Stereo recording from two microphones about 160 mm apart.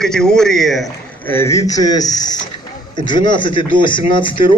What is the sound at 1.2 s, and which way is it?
A man's voice, 15° left (ahead or behind).